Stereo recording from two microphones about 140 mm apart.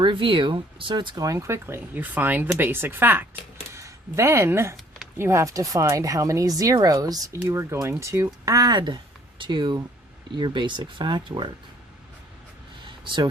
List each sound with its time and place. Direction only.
0.0 s speech: 35° right (ahead or behind)